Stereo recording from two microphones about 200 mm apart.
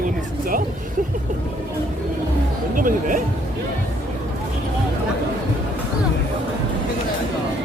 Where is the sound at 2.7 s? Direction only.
45° right (ahead or behind).